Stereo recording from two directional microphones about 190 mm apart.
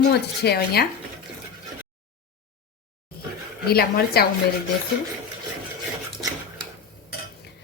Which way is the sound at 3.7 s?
55° left (ahead or behind).